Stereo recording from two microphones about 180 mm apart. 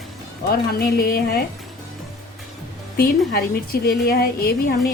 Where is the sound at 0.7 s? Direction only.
60° left (ahead or behind).